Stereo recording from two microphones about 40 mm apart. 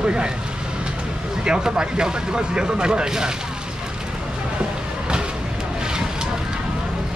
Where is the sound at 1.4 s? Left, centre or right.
Right.